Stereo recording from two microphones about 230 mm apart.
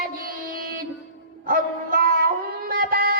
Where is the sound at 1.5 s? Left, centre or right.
Right.